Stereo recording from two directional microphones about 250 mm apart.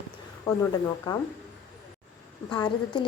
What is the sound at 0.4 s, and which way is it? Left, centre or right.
Speech, centre.